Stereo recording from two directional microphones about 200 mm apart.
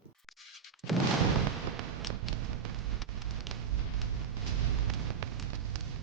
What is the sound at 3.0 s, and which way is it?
Rain on surface, centre (ahead or behind).